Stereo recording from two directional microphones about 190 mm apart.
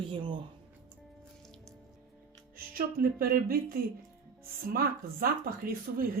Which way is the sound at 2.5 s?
50° right (ahead or behind).